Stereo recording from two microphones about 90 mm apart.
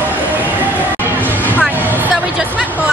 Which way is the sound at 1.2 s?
20° right (ahead or behind).